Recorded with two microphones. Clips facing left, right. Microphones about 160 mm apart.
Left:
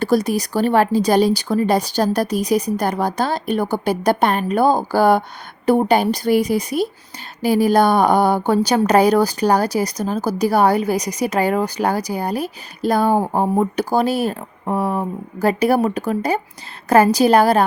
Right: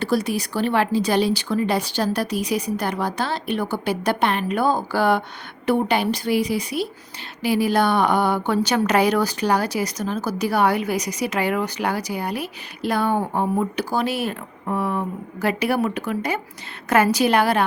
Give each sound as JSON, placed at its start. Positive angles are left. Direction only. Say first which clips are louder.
{"t": 0.0, "sound": "a woman's voice", "louder": "left 4 dB", "side_deg": 45}